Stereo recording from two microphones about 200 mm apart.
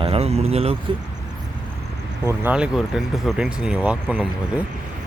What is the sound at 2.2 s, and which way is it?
Speech, 15° right (ahead or behind).